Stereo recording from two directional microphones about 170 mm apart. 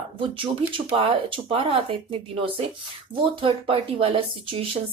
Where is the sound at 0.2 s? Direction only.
30° right (ahead or behind).